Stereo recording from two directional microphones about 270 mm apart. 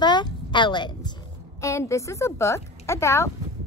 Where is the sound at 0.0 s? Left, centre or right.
Centre.